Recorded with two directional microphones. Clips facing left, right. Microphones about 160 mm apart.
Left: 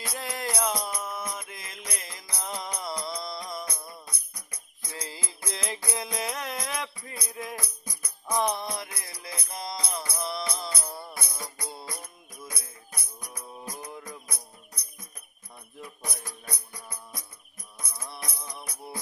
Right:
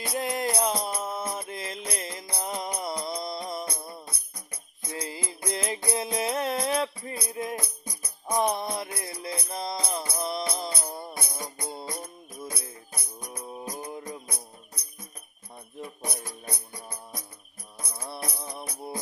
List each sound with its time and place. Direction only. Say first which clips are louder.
0.0 s music: right 6 dB; 20° right (ahead or behind)
15.8 s music: right 4 dB; 25° right (ahead or behind)